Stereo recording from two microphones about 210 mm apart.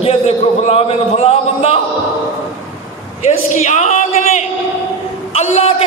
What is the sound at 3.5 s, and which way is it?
A man's voice, 35° left (ahead or behind).